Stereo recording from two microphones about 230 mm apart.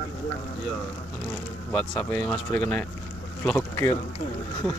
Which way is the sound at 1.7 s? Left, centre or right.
Centre.